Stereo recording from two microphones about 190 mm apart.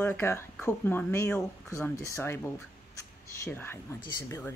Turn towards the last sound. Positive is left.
turn(degrees=25)  # may be behind; listen again after turning